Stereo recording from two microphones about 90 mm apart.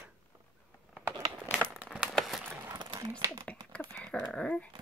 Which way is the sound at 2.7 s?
55° right (ahead or behind).